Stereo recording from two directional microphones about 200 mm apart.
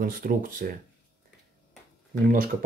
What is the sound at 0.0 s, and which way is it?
Speech, 45° right (ahead or behind).